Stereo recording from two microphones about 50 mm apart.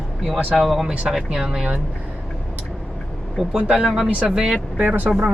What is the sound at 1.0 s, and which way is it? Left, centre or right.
Speech, centre.